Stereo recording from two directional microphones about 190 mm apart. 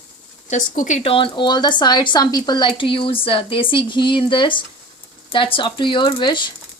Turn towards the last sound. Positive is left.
turn(degrees=25)  # may be behind; listen again after turning